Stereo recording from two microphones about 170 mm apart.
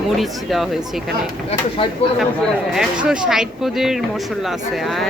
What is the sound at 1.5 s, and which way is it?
Speech, 35° left (ahead or behind).